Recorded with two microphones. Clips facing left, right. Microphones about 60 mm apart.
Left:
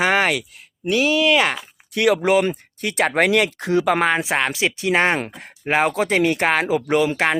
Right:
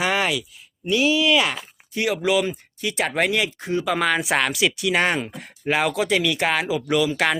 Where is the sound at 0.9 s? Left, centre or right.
Left.